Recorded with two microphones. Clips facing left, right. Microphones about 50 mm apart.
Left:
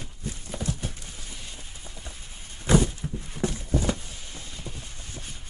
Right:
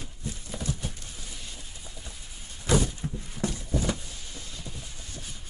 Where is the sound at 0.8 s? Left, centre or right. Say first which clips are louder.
Left 1 dB; left.